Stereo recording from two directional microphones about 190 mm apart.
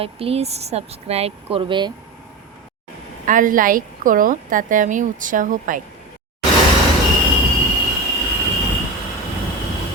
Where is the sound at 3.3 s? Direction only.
45° right (ahead or behind).